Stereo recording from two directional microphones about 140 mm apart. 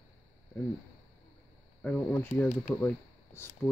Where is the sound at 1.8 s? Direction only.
10° left (ahead or behind).